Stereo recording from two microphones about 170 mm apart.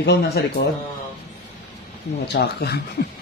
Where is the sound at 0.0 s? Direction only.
70° left (ahead or behind).